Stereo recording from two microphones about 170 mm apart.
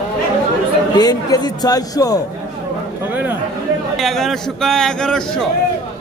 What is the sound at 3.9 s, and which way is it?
A man's voice, centre (ahead or behind).